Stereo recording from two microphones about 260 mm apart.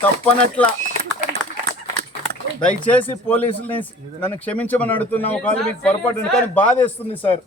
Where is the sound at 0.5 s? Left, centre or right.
Centre.